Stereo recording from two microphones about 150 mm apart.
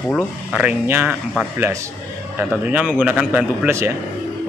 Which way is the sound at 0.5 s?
10° right (ahead or behind).